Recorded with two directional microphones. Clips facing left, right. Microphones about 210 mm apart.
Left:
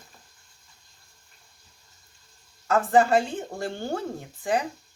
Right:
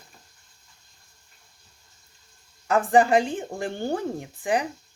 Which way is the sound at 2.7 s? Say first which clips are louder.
Right 1 dB; 15° right (ahead or behind).